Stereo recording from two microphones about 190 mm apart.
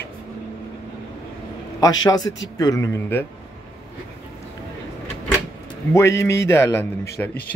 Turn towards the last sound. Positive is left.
turn(degrees=10)  # may be behind; listen again after turning